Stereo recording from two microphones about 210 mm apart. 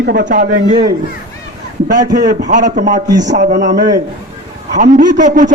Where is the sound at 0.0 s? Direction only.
45° right (ahead or behind).